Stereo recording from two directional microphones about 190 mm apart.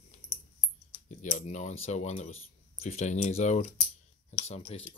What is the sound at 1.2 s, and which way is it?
Speech, 40° left (ahead or behind).